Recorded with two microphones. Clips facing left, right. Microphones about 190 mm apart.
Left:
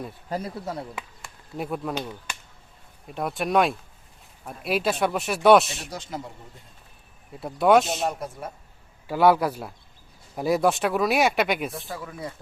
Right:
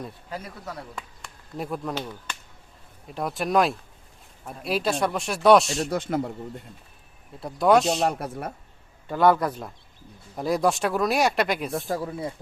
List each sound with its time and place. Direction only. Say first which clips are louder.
0.3 s speech: left 9 dB; 40° left (ahead or behind)
0.6 s speech: left 5 dB; 25° left (ahead or behind)
1.5 s a man's voice: left 1 dB; centre (ahead or behind)
3.1 s speech: even; centre (ahead or behind)
5.9 s speech: right 8 dB; 60° right (ahead or behind)
7.3 s speech: left 1 dB; centre (ahead or behind)
8.0 s speech: right 3 dB; 65° right (ahead or behind)
9.0 s a man's voice: left 1 dB; 5° left (ahead or behind)
11.9 s speech: right 6 dB; 35° right (ahead or behind)